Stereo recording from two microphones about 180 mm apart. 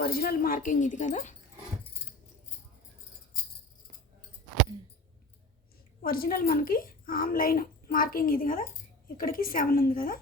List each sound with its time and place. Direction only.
0.0 s a child's voice: 55° left (ahead or behind)
6.0 s a child's voice: 55° left (ahead or behind)